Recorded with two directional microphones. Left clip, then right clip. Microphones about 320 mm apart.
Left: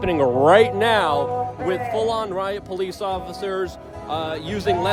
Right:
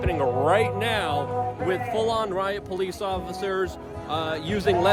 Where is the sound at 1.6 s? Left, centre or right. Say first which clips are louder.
Left 3 dB; centre.